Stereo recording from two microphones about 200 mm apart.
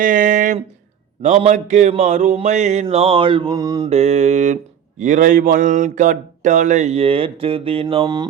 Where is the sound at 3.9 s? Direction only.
35° right (ahead or behind).